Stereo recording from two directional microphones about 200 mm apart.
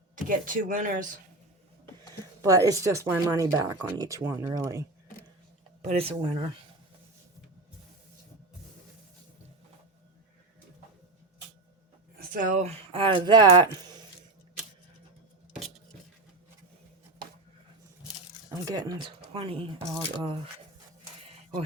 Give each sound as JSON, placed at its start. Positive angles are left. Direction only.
{"t": 0.2, "sound": "speech", "side_deg": -40}
{"t": 2.4, "sound": "speech", "side_deg": -15}
{"t": 5.8, "sound": "speech", "side_deg": -30}
{"t": 12.3, "sound": "speech", "side_deg": -40}
{"t": 18.5, "sound": "speech", "side_deg": -15}